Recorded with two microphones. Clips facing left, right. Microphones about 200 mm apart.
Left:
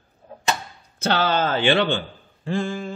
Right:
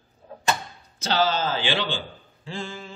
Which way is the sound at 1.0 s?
60° left (ahead or behind).